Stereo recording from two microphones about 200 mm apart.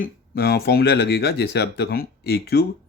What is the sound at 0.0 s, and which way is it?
Speech, 50° left (ahead or behind).